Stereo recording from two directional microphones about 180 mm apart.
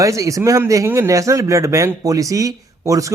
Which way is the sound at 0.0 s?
20° right (ahead or behind).